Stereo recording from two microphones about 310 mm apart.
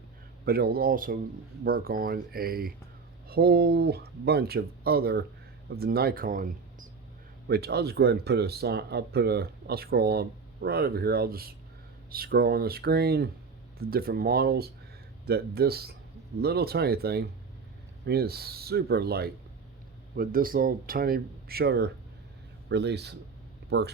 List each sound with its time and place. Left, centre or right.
0.4 s speech: right